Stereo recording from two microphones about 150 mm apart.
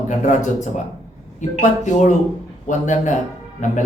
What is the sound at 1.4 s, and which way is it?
Speech, 55° left (ahead or behind).